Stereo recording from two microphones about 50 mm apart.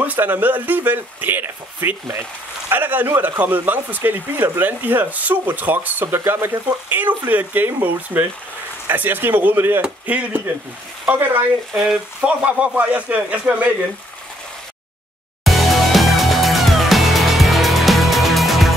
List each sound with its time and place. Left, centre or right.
0.2 s speech: right
6.2 s speech: right
6.5 s speech: right
9.8 s speech: right
11.7 s frying: centre
12.2 s speech: right
15.4 s music: centre